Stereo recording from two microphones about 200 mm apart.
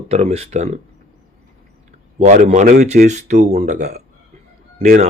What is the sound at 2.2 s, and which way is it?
A man's voice, 35° right (ahead or behind).